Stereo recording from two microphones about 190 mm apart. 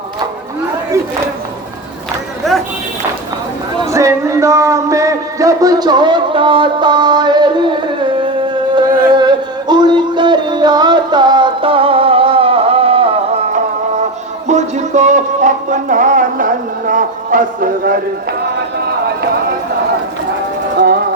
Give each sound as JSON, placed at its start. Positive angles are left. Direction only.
{"t": 2.5, "sound": "a sound", "side_deg": 0}
{"t": 3.9, "sound": "music", "side_deg": -15}
{"t": 8.9, "sound": "music", "side_deg": -50}
{"t": 9.1, "sound": "music", "side_deg": -25}
{"t": 20.7, "sound": "music", "side_deg": -55}